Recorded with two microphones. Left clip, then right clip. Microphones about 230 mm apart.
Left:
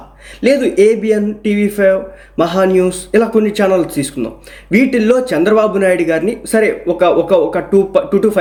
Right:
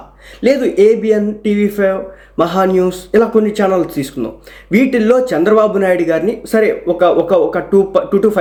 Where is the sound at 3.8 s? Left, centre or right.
Right.